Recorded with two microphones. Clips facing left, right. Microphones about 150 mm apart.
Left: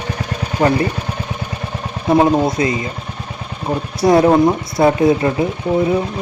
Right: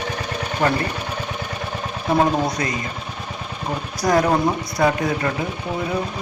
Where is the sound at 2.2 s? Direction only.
25° left (ahead or behind).